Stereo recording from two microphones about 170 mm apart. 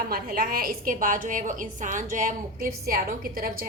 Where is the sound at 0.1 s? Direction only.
60° right (ahead or behind).